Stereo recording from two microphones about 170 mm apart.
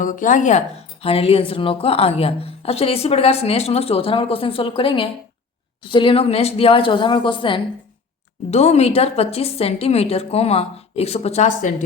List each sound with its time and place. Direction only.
0.0 s a woman's voice: 50° left (ahead or behind); by 7.6 s 30° left (ahead or behind)
8.4 s a woman's voice: 40° left (ahead or behind)